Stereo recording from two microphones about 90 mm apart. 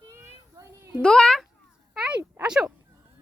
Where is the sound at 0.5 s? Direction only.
35° right (ahead or behind).